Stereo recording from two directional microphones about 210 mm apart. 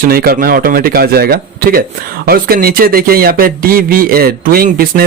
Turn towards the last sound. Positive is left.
turn(degrees=-45)  # may be behind; listen again after turning